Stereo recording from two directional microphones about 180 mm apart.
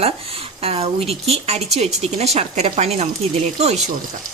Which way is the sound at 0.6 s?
35° right (ahead or behind).